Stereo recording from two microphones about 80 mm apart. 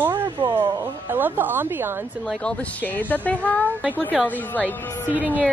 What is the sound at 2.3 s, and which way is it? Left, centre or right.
A woman's voice, centre.